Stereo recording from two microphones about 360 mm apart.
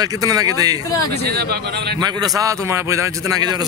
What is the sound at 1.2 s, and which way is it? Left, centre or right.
Speech, right.